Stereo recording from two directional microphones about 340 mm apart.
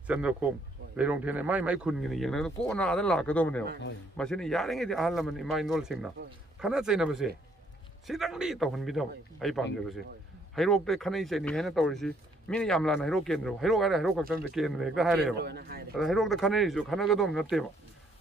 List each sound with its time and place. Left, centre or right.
0.0 s speech: centre
15.3 s a man's voice: right
16.0 s speech: centre